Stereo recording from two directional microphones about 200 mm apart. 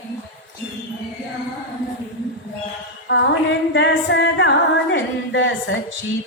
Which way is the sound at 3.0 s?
60° left (ahead or behind).